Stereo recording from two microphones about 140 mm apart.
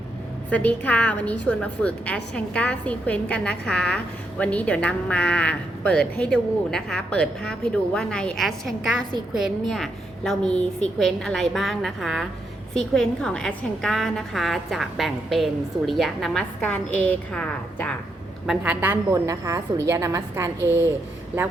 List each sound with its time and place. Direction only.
0.5 s a woman's voice: 10° left (ahead or behind)
18.4 s a woman's voice: 10° right (ahead or behind)
19.1 s a woman's voice: 25° right (ahead or behind)